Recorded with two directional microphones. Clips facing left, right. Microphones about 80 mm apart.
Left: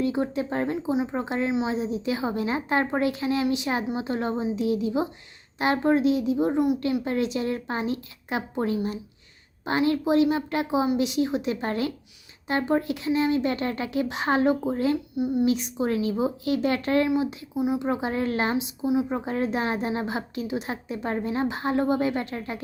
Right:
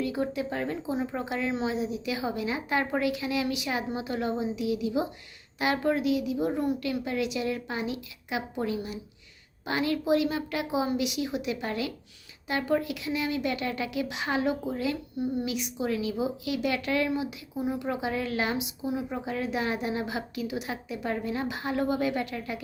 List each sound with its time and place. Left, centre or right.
0.0 s a woman's voice: left
15.1 s speech: centre
15.4 s a woman's voice: left
17.5 s speech: centre
17.7 s a woman's voice: left